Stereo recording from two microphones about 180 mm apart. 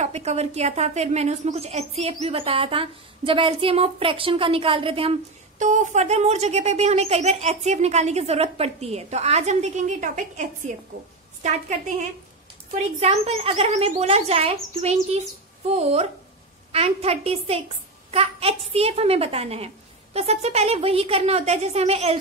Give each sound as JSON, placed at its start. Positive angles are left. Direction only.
{"t": 0.0, "sound": "a woman's voice", "side_deg": -35}
{"t": 5.6, "sound": "a woman's voice", "side_deg": -40}